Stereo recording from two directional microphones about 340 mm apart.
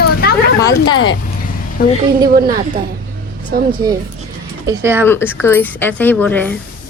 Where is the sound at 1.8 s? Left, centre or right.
Left.